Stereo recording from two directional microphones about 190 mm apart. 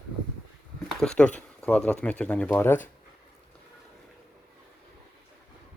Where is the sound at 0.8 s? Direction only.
5° left (ahead or behind).